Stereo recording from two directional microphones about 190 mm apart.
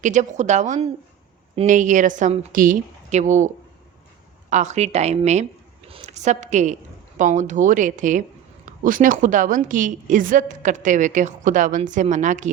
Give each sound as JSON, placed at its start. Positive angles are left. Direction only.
{"t": 0.0, "sound": "a woman's voice", "side_deg": -40}